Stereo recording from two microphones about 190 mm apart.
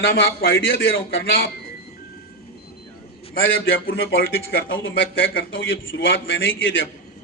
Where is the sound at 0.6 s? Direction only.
90° left.